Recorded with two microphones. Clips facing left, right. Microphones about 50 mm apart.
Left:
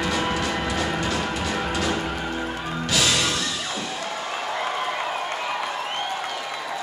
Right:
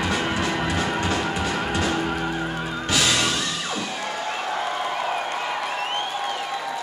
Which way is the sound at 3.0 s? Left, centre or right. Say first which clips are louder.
Right 1 dB; right.